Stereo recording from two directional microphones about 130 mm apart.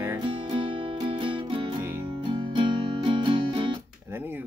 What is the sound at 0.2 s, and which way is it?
Music, 40° right (ahead or behind).